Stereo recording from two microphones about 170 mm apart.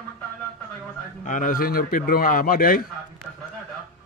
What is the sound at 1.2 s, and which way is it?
A man's voice, 50° left (ahead or behind).